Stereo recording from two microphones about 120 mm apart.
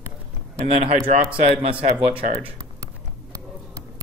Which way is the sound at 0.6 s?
65° right (ahead or behind).